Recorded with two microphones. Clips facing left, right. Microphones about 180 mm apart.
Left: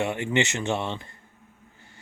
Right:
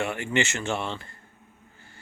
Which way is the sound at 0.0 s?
20° left (ahead or behind).